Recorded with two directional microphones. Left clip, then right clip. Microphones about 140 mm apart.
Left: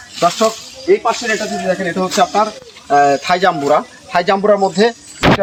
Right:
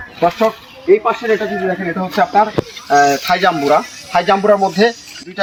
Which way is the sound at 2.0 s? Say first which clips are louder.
Right 1 dB; 20° left (ahead or behind).